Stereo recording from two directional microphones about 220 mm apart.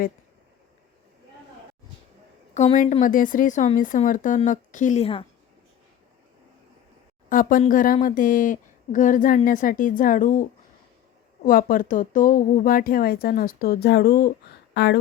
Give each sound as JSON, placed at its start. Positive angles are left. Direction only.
{"t": 2.6, "sound": "speech", "side_deg": 35}
{"t": 7.3, "sound": "speech", "side_deg": 40}
{"t": 11.4, "sound": "speech", "side_deg": 40}